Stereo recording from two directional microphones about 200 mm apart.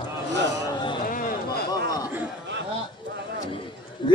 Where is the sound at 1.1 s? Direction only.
45° left (ahead or behind).